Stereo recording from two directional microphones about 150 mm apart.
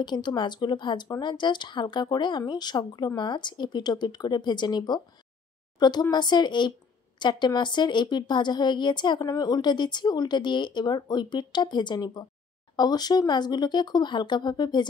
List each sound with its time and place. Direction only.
0.0 s a woman's voice: 30° left (ahead or behind)